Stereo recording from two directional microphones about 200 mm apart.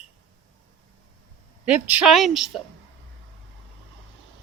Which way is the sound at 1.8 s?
5° right (ahead or behind).